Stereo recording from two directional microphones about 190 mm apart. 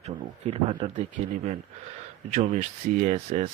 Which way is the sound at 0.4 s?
30° right (ahead or behind).